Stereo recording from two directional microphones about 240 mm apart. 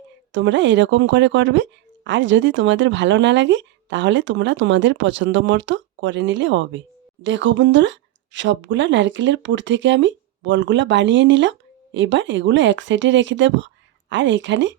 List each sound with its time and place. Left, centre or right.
0.3 s a woman's voice: right